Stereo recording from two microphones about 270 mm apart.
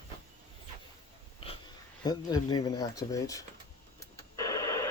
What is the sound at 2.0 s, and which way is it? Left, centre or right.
Speech, centre.